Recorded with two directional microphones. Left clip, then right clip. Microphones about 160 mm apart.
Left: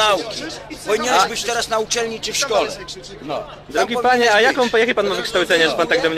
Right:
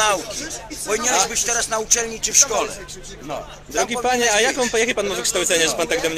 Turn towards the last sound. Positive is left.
turn(degrees=-10)  # may be behind; listen again after turning